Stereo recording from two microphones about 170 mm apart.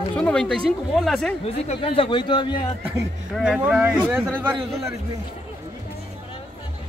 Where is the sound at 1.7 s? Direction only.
30° left (ahead or behind).